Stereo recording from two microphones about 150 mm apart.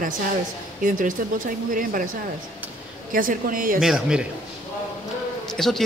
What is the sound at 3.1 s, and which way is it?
Speech, 65° right (ahead or behind).